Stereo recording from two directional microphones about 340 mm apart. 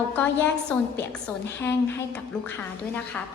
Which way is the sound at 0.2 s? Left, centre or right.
Centre.